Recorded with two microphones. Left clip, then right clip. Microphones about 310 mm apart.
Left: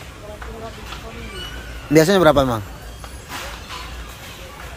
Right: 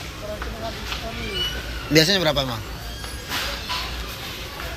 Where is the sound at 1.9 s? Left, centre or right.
Centre.